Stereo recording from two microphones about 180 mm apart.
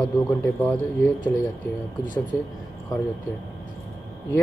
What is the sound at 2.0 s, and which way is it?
Speech, 45° left (ahead or behind).